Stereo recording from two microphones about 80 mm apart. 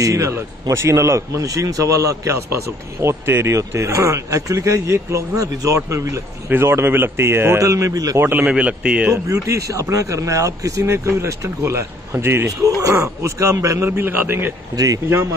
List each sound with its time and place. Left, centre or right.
0.0 s a man's voice: right
8.2 s a man's voice: right
8.5 s speech: centre
9.1 s a man's voice: right
12.4 s a man's voice: right
13.8 s a man's voice: right